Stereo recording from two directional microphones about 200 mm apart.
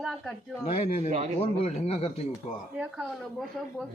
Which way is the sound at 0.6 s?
35° left (ahead or behind).